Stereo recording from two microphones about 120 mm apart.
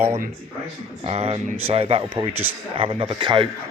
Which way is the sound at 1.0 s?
55° right (ahead or behind).